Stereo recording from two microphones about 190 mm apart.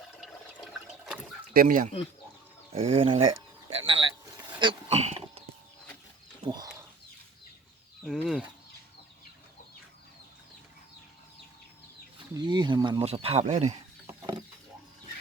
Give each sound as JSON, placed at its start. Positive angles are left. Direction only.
{"t": 1.5, "sound": "speech", "side_deg": -45}
{"t": 2.7, "sound": "speech", "side_deg": -30}
{"t": 3.7, "sound": "a sound", "side_deg": -30}
{"t": 4.6, "sound": "speech", "side_deg": -30}
{"t": 6.4, "sound": "chicken", "side_deg": -20}
{"t": 8.0, "sound": "speech", "side_deg": 0}
{"t": 12.3, "sound": "speech", "side_deg": -25}
{"t": 14.1, "sound": "a sound", "side_deg": -15}